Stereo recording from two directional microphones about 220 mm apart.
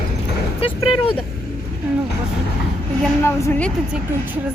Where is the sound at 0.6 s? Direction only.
25° left (ahead or behind).